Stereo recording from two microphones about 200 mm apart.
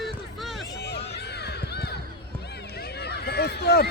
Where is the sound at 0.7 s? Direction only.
55° left (ahead or behind).